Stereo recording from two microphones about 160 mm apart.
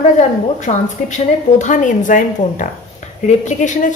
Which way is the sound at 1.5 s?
50° left (ahead or behind).